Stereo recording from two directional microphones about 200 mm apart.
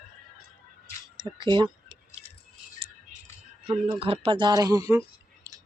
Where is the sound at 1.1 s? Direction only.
20° right (ahead or behind).